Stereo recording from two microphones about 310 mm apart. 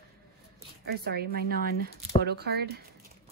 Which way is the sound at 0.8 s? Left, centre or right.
Right.